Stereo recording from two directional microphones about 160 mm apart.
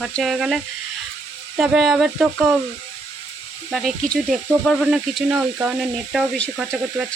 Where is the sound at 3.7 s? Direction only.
Centre (ahead or behind).